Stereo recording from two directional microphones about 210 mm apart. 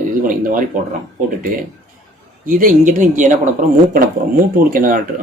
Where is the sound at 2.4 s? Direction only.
40° right (ahead or behind).